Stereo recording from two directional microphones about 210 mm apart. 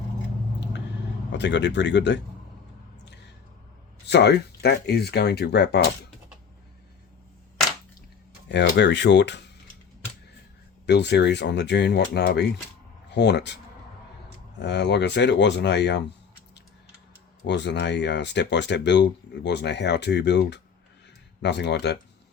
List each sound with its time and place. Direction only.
1.3 s speech: 55° left (ahead or behind)
4.0 s speech: 55° left (ahead or behind)
8.4 s speech: 55° left (ahead or behind)
10.8 s speech: 55° left (ahead or behind)
14.6 s speech: 55° left (ahead or behind)
17.4 s speech: 55° left (ahead or behind)